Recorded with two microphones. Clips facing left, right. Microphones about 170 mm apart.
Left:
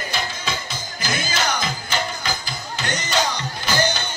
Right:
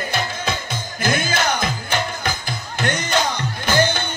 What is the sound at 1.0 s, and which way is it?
Music, 55° right (ahead or behind).